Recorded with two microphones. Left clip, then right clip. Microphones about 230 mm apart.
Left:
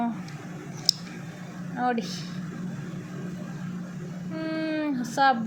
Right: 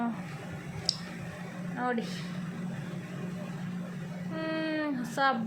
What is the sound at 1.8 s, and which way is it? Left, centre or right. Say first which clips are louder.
Speech: left 5 dB; centre.